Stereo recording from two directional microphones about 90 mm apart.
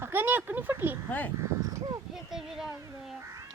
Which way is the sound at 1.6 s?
35° right (ahead or behind).